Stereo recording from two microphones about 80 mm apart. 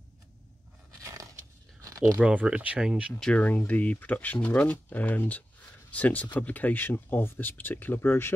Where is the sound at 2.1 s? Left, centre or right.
Centre.